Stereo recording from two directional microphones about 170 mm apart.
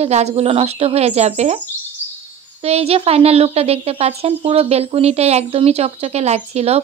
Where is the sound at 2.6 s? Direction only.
35° right (ahead or behind).